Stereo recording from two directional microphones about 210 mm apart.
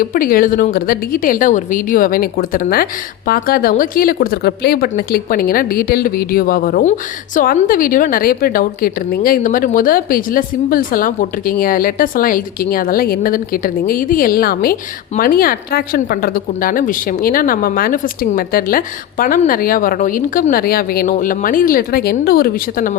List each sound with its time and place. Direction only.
0.0 s a woman's voice: 40° left (ahead or behind)